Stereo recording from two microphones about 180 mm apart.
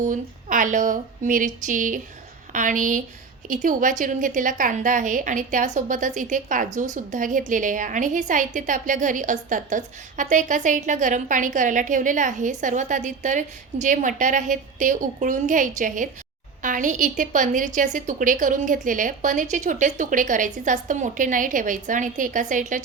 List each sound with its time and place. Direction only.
0.0 s a woman's voice: 45° right (ahead or behind)